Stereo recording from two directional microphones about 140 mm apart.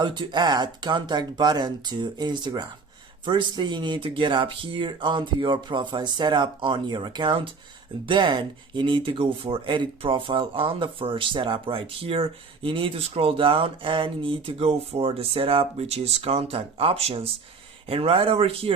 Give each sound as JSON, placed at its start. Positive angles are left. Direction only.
{"t": 0.0, "sound": "speech", "side_deg": -35}